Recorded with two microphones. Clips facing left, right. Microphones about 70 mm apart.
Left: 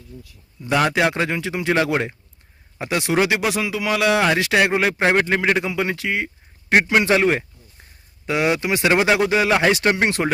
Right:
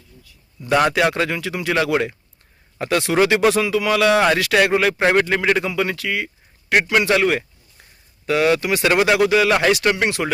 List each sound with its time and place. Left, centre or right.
0.9 s a man's voice: centre
4.4 s a man's voice: left